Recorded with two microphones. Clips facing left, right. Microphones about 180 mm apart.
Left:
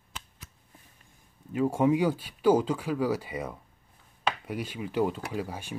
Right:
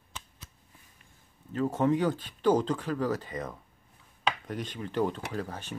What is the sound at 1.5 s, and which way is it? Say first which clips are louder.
Speech: left 2 dB; 10° left (ahead or behind).